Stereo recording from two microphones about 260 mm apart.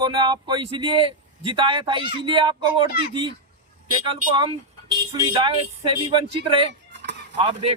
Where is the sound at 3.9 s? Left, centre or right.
Centre.